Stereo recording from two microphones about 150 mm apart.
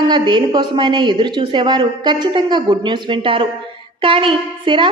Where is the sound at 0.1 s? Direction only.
30° right (ahead or behind).